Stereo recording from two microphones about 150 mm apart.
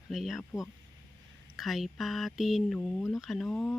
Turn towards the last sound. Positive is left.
turn(degrees=10)  # may be behind; listen again after turning